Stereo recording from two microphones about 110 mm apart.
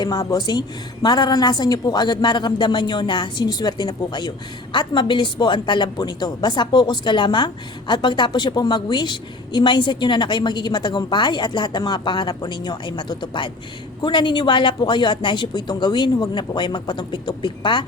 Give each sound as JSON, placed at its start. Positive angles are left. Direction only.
{"t": 0.0, "sound": "a woman's voice", "side_deg": 30}